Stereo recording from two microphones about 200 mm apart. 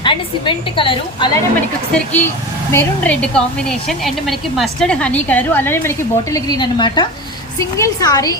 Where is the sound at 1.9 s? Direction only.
10° left (ahead or behind).